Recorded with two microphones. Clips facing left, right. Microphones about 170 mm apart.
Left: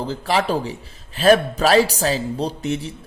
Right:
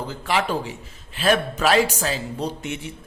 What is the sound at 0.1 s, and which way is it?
A man's voice, 35° left (ahead or behind).